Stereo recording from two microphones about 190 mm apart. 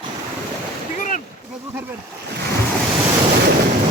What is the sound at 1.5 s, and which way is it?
Splash, 10° right (ahead or behind).